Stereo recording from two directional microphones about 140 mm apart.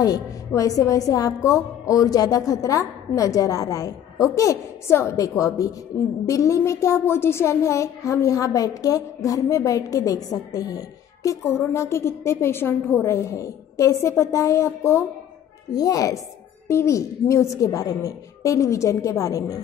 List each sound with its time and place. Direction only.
0.6 s a woman's voice: 25° left (ahead or behind)